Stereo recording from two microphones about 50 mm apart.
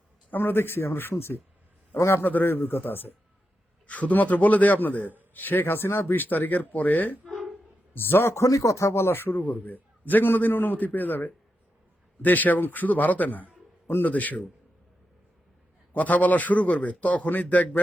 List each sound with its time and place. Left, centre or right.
0.3 s a man's voice: left
2.0 s speech: left
2.2 s a man's voice: left
3.8 s speech: left
7.3 s a sound: centre
7.9 s a man's voice: left
8.4 s speech: left
9.4 s a man's voice: left
15.9 s speech: left